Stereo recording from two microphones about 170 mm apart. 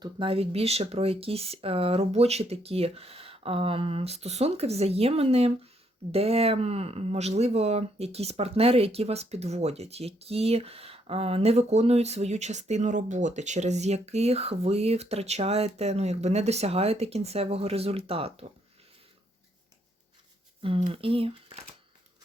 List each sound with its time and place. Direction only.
0.0 s speech: 30° right (ahead or behind)
20.6 s speech: 35° right (ahead or behind)